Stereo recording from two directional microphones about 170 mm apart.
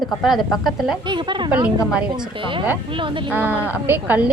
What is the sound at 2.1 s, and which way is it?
Speech, 30° right (ahead or behind).